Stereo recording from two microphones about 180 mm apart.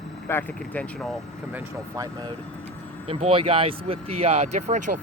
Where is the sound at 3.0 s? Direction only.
30° right (ahead or behind).